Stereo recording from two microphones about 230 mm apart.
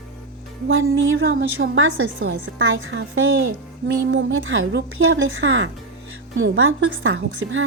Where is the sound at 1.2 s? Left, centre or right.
Right.